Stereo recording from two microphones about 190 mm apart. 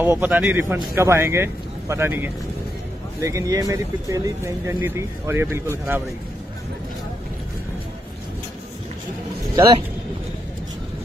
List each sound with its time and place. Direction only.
0.0 s speech: 10° right (ahead or behind)